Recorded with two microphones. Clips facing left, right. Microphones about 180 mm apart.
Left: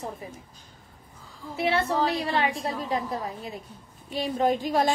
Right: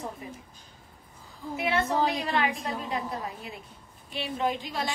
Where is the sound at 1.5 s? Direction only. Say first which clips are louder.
Left 2 dB; 35° left (ahead or behind).